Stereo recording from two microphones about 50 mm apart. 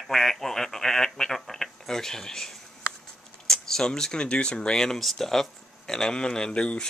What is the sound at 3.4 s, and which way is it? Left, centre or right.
Speech, centre.